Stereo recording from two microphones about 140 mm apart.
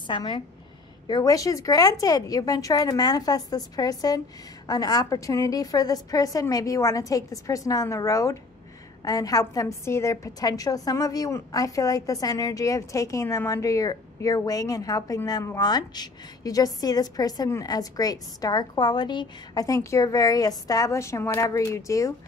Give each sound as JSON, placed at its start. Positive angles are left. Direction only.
{"t": 0.0, "sound": "a woman's voice", "side_deg": 35}